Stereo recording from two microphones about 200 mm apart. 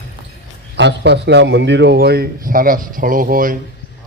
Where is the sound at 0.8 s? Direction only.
60° right (ahead or behind).